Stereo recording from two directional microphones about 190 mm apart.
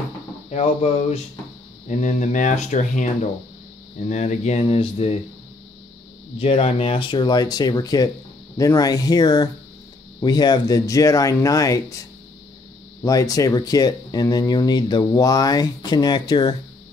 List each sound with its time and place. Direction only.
0.5 s speech: 35° left (ahead or behind)
6.3 s speech: 30° left (ahead or behind)
13.0 s speech: 20° left (ahead or behind)